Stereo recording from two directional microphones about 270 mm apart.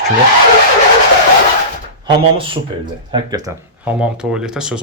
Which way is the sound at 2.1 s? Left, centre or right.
Centre.